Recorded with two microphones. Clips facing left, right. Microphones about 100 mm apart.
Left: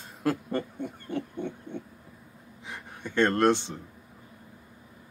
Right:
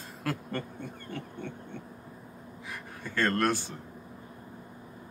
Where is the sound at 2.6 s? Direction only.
20° left (ahead or behind).